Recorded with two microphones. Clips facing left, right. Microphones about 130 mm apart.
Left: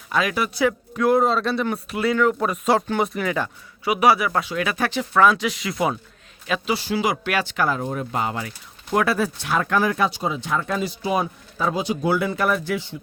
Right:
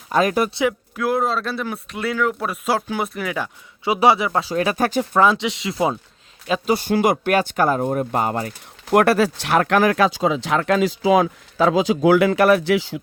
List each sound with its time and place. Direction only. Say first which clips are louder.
0.1 s speech: right 5 dB; 40° right (ahead or behind)
0.9 s speech: left 5 dB; centre (ahead or behind)
3.8 s speech: right 2 dB; 25° right (ahead or behind); by 5.0 s 40° right (ahead or behind)
5.1 s speech: left 2 dB; 25° right (ahead or behind)
6.7 s speech: right 5 dB; 50° right (ahead or behind)
8.9 s speech: right 5 dB; 65° right (ahead or behind); by 13.0 s 90° right